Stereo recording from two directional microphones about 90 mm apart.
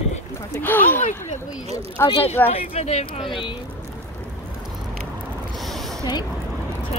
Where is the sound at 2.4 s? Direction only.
20° left (ahead or behind).